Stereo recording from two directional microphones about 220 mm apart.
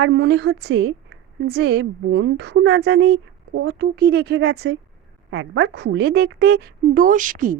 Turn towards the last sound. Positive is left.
turn(degrees=-40)  # may be behind; listen again after turning